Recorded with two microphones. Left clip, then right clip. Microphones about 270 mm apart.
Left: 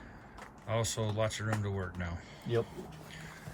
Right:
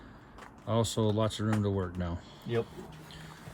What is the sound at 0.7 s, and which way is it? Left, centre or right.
Speech, left.